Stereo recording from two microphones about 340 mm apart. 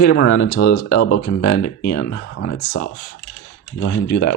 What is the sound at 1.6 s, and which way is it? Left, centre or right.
Speech, left.